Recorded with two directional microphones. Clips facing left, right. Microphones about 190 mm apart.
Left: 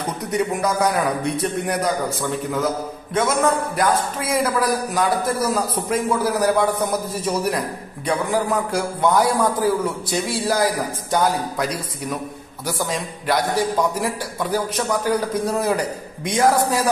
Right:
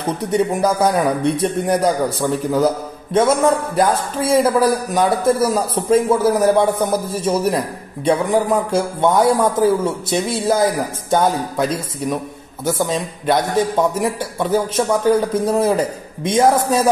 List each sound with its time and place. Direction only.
0.3 s a man's voice: 30° right (ahead or behind)
13.3 s a man's voice: 20° right (ahead or behind)